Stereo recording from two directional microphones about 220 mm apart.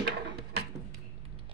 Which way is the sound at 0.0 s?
45° right (ahead or behind).